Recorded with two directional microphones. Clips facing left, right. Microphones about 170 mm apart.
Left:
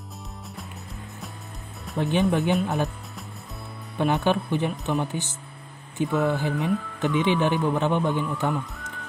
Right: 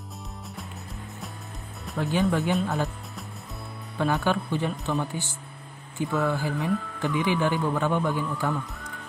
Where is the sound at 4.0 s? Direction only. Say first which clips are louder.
Left 2 dB; 20° left (ahead or behind).